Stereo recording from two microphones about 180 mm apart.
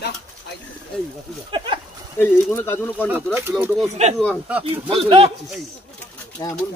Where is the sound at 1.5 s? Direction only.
30° right (ahead or behind).